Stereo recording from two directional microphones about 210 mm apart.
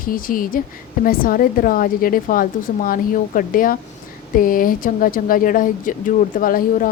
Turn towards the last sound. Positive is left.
turn(degrees=40)  # may be behind; listen again after turning